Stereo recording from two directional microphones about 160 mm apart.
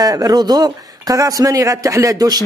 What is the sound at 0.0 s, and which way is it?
Speech, 25° right (ahead or behind).